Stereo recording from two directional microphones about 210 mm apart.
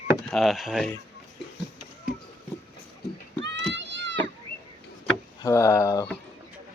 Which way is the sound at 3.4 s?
60° right (ahead or behind).